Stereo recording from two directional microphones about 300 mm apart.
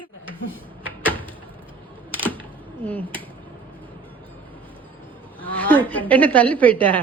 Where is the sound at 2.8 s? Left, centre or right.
Centre.